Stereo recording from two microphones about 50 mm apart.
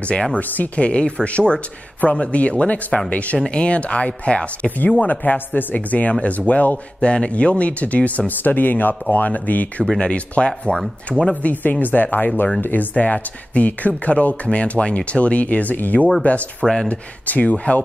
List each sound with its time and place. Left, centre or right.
0.1 s speech: centre
0.4 s speech: left
4.6 s speech: left
11.1 s speech: centre
11.4 s speech: left